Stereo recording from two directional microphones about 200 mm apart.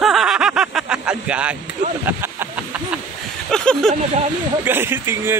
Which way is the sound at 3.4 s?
5° left (ahead or behind).